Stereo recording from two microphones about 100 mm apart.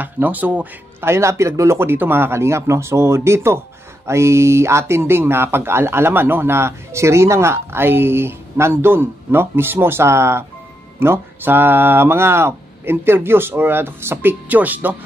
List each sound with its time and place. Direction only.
0.0 s speech: 15° right (ahead or behind)